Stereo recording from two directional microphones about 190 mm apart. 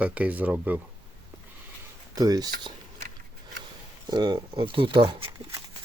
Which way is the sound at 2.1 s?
20° right (ahead or behind).